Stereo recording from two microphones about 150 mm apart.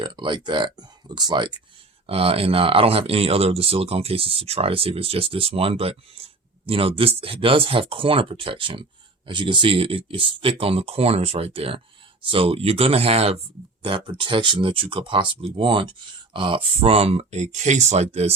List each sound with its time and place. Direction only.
0.0 s speech: 30° right (ahead or behind)
2.0 s speech: 40° right (ahead or behind)